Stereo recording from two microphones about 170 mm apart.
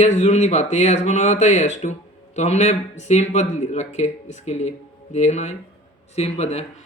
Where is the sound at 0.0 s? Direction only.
40° left (ahead or behind).